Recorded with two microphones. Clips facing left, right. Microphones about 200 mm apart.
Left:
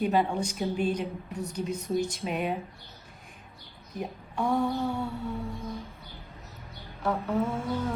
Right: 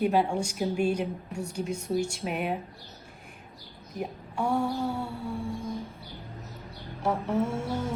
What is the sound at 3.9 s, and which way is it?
A woman's voice, 10° right (ahead or behind).